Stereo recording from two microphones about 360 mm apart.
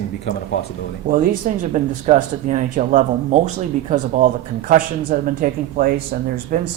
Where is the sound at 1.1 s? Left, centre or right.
Right.